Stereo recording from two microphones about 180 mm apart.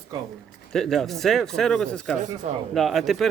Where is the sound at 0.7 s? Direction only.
Centre (ahead or behind).